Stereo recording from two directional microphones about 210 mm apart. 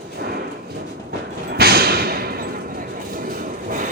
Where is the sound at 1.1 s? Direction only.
50° right (ahead or behind).